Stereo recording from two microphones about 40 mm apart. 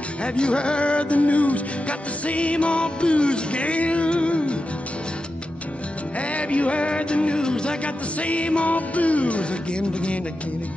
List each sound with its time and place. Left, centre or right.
0.2 s music: left
6.3 s music: left
7.8 s music: left